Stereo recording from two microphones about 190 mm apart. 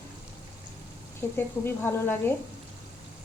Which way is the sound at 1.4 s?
10° left (ahead or behind).